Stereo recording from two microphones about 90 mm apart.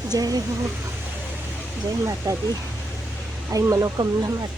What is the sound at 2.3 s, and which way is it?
Speech, 35° right (ahead or behind).